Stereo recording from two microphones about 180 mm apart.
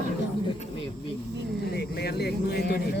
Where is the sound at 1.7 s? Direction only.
60° left (ahead or behind).